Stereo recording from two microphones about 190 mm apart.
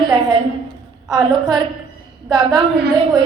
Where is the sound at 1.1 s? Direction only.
20° right (ahead or behind).